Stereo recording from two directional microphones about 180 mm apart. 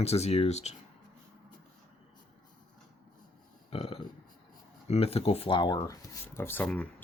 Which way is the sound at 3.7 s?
35° left (ahead or behind).